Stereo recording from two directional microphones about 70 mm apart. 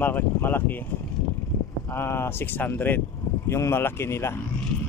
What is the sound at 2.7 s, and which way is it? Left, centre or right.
Speech, left.